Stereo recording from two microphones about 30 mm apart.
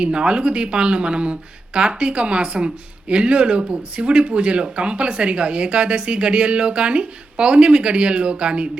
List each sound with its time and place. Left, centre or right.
0.0 s speech: right